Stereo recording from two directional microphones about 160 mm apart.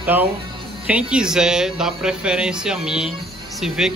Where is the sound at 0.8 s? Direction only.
5° right (ahead or behind).